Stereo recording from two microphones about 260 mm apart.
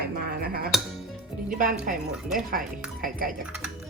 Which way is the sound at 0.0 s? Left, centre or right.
Right.